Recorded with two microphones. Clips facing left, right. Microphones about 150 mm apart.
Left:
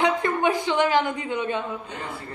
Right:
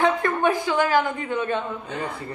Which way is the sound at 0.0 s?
20° left (ahead or behind).